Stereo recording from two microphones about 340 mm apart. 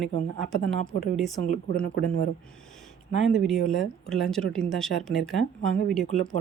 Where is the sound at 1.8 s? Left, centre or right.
Left.